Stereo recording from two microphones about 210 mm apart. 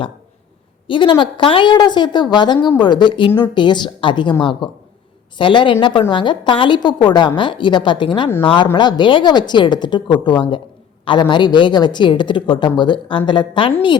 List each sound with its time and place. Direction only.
0.9 s a woman's voice: 20° left (ahead or behind)